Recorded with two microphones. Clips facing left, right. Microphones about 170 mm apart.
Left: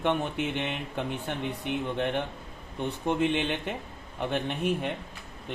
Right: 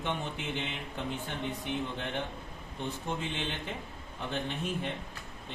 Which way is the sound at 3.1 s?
65° left (ahead or behind).